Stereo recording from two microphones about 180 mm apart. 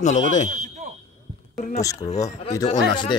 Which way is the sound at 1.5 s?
40° left (ahead or behind).